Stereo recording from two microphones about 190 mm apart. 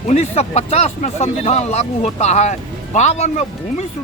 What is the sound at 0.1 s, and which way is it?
Speech, 35° left (ahead or behind).